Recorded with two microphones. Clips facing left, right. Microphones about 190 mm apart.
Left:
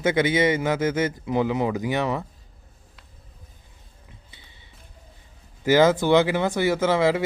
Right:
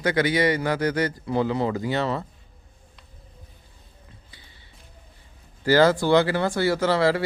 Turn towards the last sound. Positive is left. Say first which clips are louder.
# left 1 dB
turn(degrees=20)  # may be behind; listen again after turning